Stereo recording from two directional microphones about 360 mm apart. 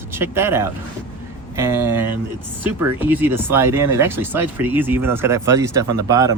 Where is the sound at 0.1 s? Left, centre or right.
Centre.